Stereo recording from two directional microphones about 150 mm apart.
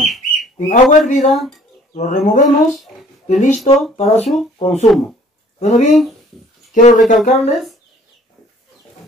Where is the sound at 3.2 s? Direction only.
50° left (ahead or behind).